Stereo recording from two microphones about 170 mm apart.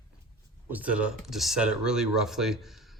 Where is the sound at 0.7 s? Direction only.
10° right (ahead or behind).